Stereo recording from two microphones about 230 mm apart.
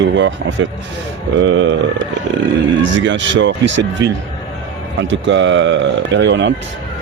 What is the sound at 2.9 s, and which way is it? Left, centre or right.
Speech, right.